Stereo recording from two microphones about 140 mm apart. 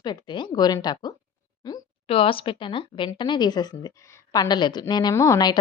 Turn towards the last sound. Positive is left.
turn(degrees=25)  # may be behind; listen again after turning